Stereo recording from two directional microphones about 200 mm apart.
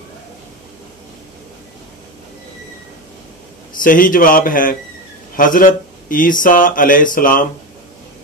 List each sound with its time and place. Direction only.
3.8 s mantra: 45° left (ahead or behind)
5.3 s speech: 45° left (ahead or behind)
6.4 s mantra: 40° left (ahead or behind)